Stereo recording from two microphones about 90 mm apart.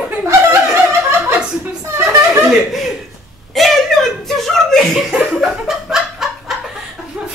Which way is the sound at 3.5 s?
Centre (ahead or behind).